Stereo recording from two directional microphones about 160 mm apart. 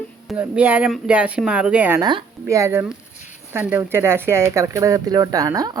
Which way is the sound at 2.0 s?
25° right (ahead or behind).